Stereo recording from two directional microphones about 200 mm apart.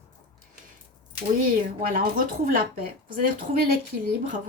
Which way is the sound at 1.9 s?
45° right (ahead or behind).